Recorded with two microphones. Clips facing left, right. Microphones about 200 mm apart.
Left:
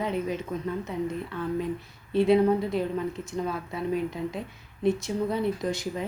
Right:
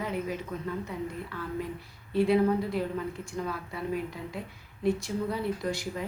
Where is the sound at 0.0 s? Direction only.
20° left (ahead or behind).